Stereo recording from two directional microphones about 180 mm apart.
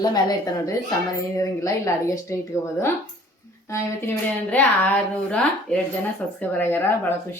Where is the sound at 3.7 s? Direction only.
15° left (ahead or behind).